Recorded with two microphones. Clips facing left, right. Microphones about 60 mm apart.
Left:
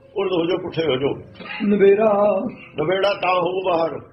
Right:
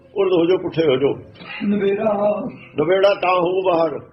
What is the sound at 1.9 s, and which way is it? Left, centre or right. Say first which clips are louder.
Male singing: left 3 dB; left.